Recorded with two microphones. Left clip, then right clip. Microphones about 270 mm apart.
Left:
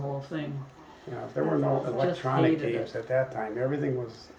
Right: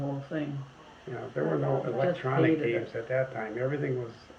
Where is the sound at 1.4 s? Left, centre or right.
Left.